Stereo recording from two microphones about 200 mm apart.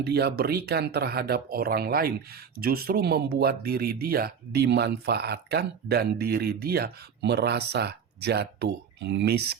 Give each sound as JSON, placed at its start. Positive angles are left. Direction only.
{"t": 0.0, "sound": "speech", "side_deg": -55}